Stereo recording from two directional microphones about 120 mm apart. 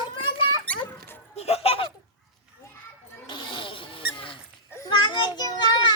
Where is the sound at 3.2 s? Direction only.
40° left (ahead or behind).